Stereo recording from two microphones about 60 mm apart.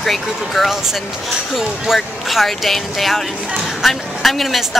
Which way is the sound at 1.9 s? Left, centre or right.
Centre.